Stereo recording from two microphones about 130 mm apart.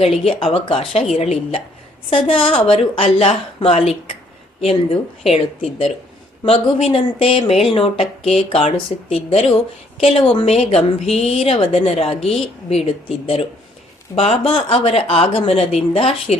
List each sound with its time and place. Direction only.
0.0 s a woman's voice: 50° left (ahead or behind)
1.1 s a woman's voice: 55° left (ahead or behind)